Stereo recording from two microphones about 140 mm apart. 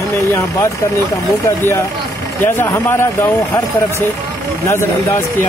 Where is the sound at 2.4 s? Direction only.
15° left (ahead or behind).